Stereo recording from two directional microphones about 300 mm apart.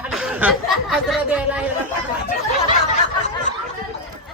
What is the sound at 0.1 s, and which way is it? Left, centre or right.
Speech, centre.